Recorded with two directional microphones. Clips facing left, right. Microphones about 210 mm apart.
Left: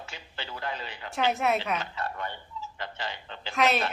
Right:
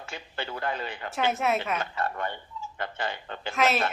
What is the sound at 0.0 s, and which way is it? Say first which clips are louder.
A man's voice: right 5 dB; 50° right (ahead or behind).